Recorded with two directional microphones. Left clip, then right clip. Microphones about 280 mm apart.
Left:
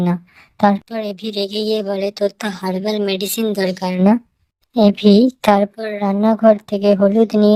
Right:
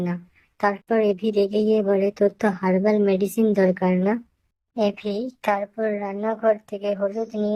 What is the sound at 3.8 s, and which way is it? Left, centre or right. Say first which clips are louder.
Speech: left 5 dB; left.